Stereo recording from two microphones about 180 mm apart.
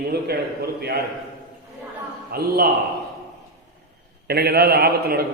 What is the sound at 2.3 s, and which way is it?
Speech, 55° right (ahead or behind).